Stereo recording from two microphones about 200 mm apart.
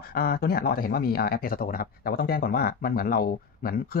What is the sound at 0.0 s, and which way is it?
Speech, 50° left (ahead or behind).